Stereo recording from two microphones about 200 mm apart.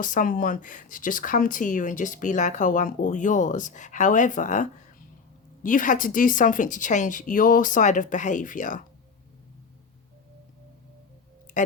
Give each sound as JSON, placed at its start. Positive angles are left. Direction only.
{"t": 0.0, "sound": "speech", "side_deg": 40}
{"t": 11.6, "sound": "speech", "side_deg": 40}